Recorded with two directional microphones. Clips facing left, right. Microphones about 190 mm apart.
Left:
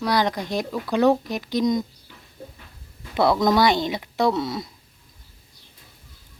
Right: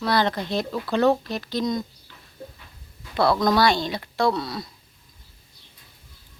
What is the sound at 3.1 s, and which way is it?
Speech, 20° left (ahead or behind).